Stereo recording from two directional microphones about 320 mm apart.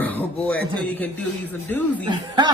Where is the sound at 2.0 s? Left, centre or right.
Centre.